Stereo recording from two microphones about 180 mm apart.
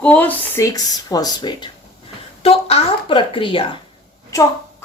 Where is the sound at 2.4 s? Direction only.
35° left (ahead or behind).